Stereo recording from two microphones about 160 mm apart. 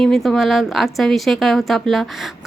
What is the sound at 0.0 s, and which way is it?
A woman's voice, centre (ahead or behind).